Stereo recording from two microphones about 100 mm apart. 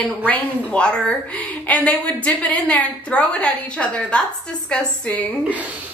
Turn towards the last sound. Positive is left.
turn(degrees=15)  # may be behind; listen again after turning